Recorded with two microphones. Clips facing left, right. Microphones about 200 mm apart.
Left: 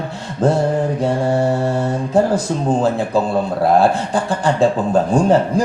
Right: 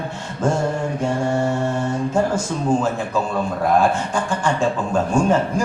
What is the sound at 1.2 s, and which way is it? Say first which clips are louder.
Mantra: left 2 dB; 35° left (ahead or behind).